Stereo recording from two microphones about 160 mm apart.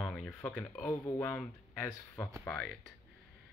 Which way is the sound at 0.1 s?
5° left (ahead or behind).